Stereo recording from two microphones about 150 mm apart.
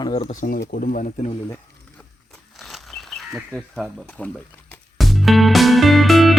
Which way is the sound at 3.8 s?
Centre (ahead or behind).